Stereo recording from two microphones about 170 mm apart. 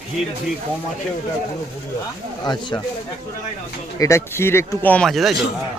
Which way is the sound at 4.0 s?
15° left (ahead or behind).